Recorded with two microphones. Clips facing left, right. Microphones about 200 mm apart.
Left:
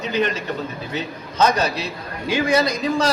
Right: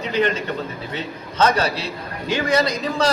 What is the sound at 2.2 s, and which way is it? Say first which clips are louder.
Speech: left 1 dB; 10° left (ahead or behind).